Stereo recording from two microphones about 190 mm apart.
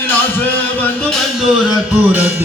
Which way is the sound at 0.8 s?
Centre (ahead or behind).